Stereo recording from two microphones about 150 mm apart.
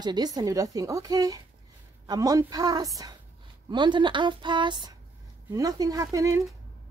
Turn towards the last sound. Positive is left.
turn(degrees=-20)  # may be behind; listen again after turning